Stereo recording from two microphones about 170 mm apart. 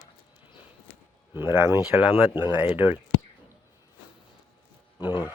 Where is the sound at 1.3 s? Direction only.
15° right (ahead or behind).